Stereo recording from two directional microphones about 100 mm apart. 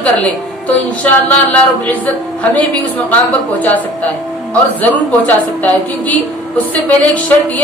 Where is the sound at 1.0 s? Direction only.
10° left (ahead or behind).